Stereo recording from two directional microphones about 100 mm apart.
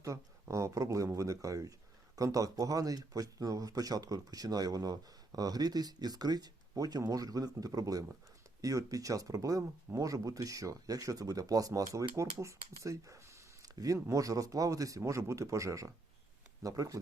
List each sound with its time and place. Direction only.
0.0 s speech: 30° right (ahead or behind)